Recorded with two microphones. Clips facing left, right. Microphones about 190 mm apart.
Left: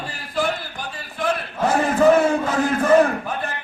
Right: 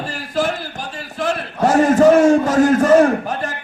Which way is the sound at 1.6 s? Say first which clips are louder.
Right 5 dB; 45° right (ahead or behind).